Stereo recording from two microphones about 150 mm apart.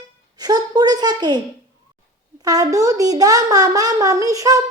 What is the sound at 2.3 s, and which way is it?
Speech, 25° right (ahead or behind).